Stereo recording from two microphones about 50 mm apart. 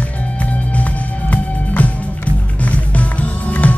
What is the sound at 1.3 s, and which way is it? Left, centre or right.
Music, left.